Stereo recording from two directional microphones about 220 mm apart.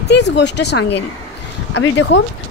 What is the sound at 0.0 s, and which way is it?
A woman's voice, 50° left (ahead or behind).